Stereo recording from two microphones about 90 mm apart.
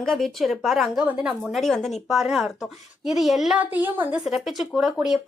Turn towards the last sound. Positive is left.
turn(degrees=-5)  # may be behind; listen again after turning